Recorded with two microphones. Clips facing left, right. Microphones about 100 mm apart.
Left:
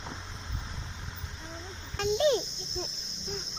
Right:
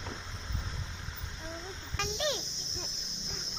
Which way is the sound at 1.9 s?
30° left (ahead or behind).